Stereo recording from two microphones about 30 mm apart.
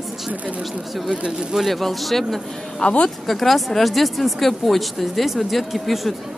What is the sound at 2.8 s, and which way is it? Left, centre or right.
Speech, left.